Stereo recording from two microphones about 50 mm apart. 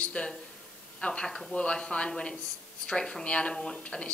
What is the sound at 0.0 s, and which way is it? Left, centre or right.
Speech, left.